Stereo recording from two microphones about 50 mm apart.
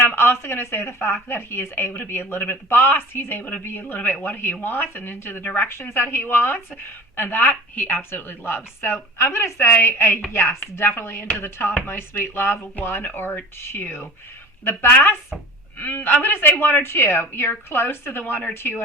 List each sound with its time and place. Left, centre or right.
0.0 s a woman's voice: left
10.3 s speech: left
10.6 s a woman's voice: left
15.8 s a woman's voice: left